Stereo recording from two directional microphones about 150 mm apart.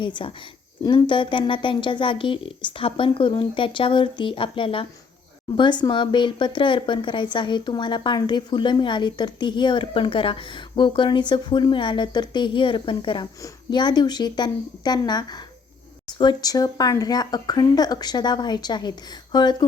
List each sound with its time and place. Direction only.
0.0 s speech: 35° left (ahead or behind)